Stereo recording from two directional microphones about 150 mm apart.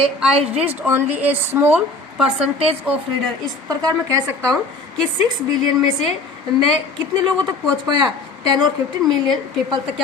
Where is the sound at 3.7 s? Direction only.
25° right (ahead or behind).